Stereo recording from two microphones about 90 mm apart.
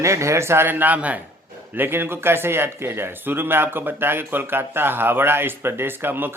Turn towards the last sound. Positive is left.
turn(degrees=-25)  # may be behind; listen again after turning